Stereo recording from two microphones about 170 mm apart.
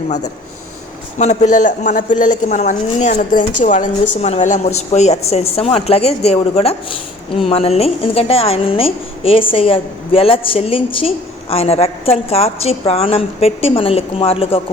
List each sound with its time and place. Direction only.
1.2 s a woman's voice: 45° left (ahead or behind)